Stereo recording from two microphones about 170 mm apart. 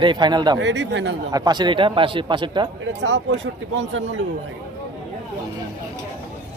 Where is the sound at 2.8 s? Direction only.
90° right.